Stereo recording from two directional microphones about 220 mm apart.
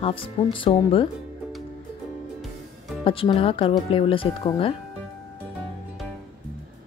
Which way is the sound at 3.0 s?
25° left (ahead or behind).